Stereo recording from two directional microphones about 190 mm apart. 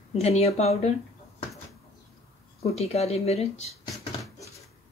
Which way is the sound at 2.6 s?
35° left (ahead or behind).